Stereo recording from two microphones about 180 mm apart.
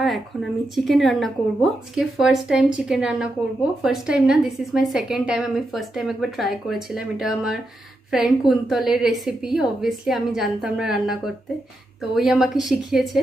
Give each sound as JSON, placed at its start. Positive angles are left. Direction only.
{"t": 0.0, "sound": "a woman's voice", "side_deg": 0}